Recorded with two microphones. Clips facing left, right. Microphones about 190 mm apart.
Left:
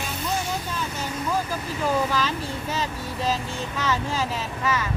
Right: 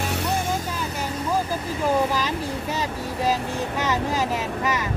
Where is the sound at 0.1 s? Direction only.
70° right (ahead or behind).